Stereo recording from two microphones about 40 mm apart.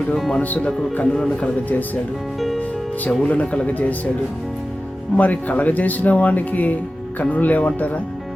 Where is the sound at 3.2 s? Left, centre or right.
Left.